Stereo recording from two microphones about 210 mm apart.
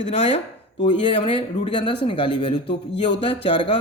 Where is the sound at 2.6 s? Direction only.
55° left (ahead or behind).